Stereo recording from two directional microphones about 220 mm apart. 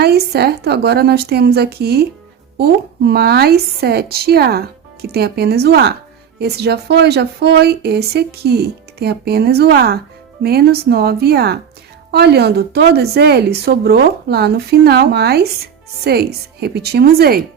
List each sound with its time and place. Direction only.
0.0 s a woman's voice: 45° right (ahead or behind)